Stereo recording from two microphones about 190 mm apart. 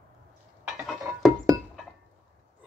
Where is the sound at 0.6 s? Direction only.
5° right (ahead or behind).